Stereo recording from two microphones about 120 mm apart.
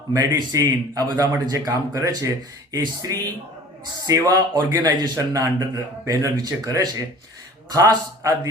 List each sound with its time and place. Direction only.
0.1 s a man's voice: 30° right (ahead or behind)